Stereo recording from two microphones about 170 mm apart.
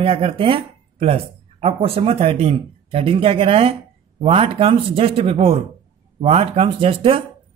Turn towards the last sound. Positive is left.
turn(degrees=-30)  # may be behind; listen again after turning